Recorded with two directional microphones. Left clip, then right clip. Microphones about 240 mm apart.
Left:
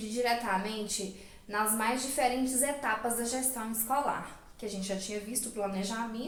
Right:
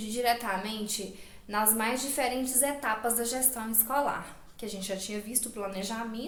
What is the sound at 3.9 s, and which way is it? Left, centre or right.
A woman's voice, right.